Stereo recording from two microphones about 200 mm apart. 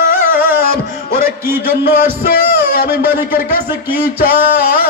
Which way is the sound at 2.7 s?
45° left (ahead or behind).